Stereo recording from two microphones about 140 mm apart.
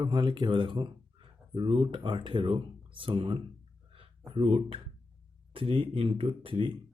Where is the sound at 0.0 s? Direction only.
30° right (ahead or behind).